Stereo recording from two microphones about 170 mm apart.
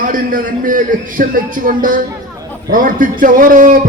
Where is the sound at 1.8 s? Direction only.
55° right (ahead or behind).